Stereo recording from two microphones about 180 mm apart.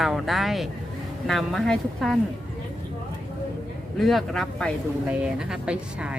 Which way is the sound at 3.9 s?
Centre (ahead or behind).